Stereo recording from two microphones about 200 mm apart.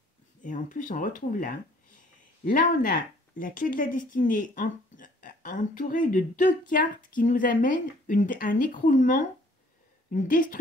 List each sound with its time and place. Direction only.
0.4 s a woman's voice: 40° left (ahead or behind)